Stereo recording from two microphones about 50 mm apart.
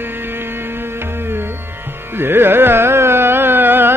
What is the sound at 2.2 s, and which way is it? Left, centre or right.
Carnatic music, right.